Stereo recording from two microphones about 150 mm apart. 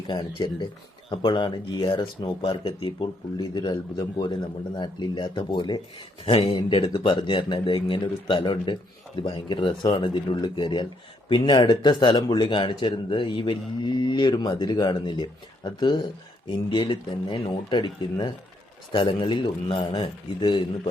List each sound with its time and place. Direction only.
0.1 s speech: 30° left (ahead or behind)